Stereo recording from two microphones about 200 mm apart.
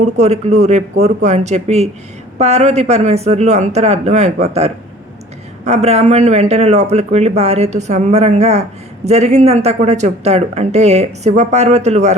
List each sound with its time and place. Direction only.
0.0 s speech: 35° right (ahead or behind)